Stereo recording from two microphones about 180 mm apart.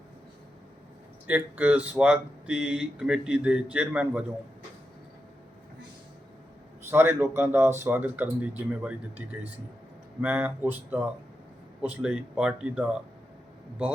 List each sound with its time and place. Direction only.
1.3 s speech: 10° right (ahead or behind)
6.9 s speech: 15° right (ahead or behind)